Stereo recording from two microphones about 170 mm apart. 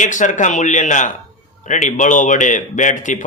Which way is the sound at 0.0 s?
45° left (ahead or behind).